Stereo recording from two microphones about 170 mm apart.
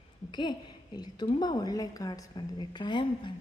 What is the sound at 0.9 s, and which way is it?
A woman's voice, 25° left (ahead or behind).